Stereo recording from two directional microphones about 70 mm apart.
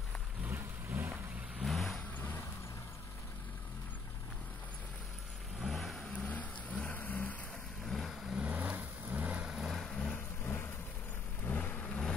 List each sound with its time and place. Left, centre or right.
0.4 s vehicle: right
1.6 s vehicle: centre
2.1 s vehicle: left
5.6 s vehicle: centre
6.1 s vehicle: centre
7.8 s vehicle: centre
8.4 s vehicle: right; by 10.1 s centre
10.4 s vehicle: left